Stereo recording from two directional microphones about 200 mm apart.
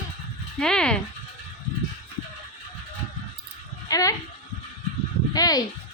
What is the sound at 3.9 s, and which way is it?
Speech, 15° left (ahead or behind).